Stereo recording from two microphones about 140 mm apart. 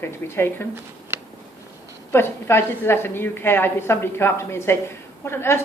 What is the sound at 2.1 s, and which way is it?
A woman's voice, 15° left (ahead or behind).